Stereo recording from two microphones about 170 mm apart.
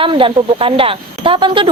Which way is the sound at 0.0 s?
30° right (ahead or behind).